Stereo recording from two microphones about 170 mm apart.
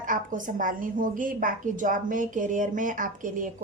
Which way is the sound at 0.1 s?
50° right (ahead or behind).